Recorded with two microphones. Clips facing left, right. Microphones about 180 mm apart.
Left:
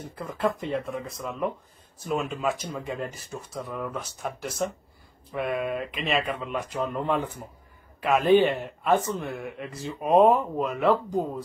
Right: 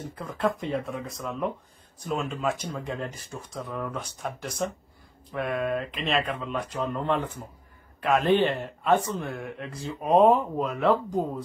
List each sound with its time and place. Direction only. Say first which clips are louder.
0.1 s speech: left 1 dB; centre (ahead or behind)